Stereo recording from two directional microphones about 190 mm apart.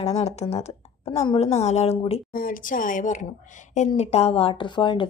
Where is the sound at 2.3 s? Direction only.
45° left (ahead or behind); by 5.0 s 25° left (ahead or behind).